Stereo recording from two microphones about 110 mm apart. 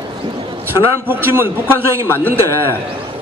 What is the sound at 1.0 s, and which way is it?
A man's voice, 20° right (ahead or behind).